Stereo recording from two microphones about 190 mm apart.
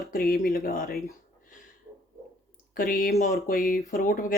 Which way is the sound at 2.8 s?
50° left (ahead or behind).